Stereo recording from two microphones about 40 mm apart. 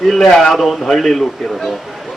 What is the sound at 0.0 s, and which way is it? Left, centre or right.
Speech, centre.